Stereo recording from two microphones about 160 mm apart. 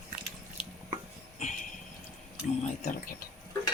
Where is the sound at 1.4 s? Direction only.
45° left (ahead or behind).